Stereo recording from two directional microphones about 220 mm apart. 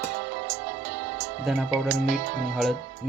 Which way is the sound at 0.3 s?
50° right (ahead or behind).